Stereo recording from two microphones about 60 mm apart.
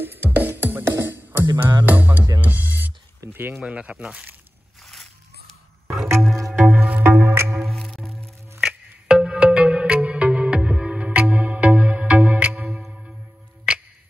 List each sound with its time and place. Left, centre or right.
0.0 s music: right
3.3 s speech: right
3.5 s speech: centre
5.9 s music: centre
6.6 s music: centre
7.0 s music: right
7.6 s music: centre
8.5 s music: centre